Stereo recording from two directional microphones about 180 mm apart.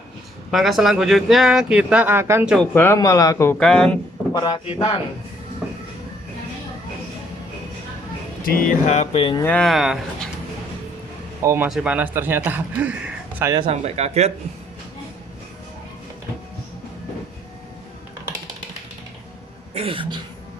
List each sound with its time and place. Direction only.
0.5 s speech: centre (ahead or behind)
2.6 s speech: 10° left (ahead or behind)
3.6 s speech: 5° left (ahead or behind)
4.4 s a man's voice: 25° left (ahead or behind)
8.4 s speech: 55° left (ahead or behind)
9.4 s speech: 5° left (ahead or behind)
11.4 s a man's voice: 10° right (ahead or behind)
13.6 s speech: 35° right (ahead or behind)
19.7 s speech: 30° right (ahead or behind)